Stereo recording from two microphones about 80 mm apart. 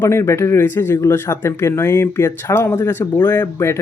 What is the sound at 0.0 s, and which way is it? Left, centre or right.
Speech, left.